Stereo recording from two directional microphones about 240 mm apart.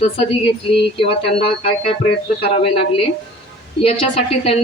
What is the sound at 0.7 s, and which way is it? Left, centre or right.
A woman's voice, left.